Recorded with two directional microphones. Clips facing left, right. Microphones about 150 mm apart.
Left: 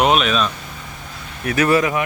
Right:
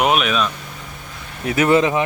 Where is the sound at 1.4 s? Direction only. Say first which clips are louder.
Right 1 dB; 20° right (ahead or behind).